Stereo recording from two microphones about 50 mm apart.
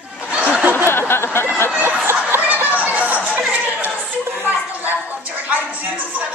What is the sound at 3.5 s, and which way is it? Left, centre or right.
Chatter, right.